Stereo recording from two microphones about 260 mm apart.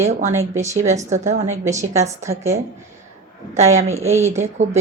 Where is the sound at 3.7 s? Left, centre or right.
Right.